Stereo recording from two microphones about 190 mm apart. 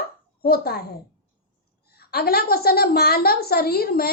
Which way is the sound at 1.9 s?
55° left (ahead or behind).